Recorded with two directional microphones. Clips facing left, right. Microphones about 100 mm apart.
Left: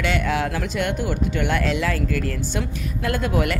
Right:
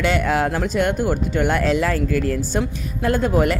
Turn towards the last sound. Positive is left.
turn(degrees=-35)  # may be behind; listen again after turning